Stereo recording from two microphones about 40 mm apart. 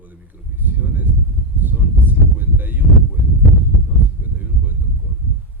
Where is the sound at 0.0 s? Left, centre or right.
Right.